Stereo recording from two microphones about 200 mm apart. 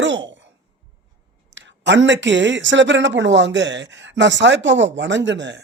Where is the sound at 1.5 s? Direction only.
60° right (ahead or behind).